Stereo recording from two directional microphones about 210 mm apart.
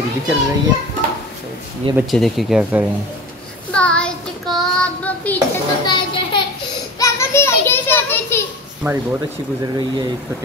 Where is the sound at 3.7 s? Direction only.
5° left (ahead or behind).